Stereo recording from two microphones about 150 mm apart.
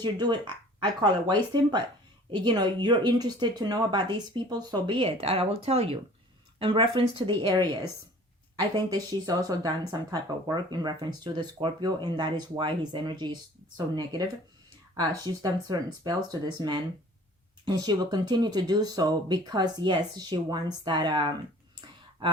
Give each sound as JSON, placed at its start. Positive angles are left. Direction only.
{"t": 0.0, "sound": "speech", "side_deg": -30}